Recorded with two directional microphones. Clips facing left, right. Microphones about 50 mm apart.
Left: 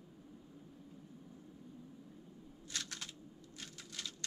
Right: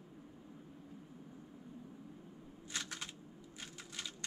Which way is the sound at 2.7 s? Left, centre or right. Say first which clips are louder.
Right 2 dB; centre.